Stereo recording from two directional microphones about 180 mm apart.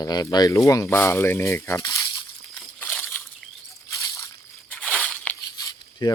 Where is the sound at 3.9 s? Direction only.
15° left (ahead or behind).